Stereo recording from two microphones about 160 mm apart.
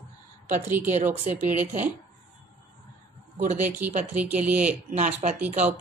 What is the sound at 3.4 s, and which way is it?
Speech, 50° right (ahead or behind).